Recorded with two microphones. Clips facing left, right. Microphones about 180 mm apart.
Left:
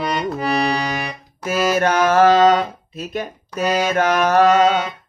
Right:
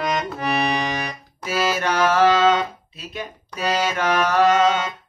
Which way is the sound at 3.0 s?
50° left (ahead or behind).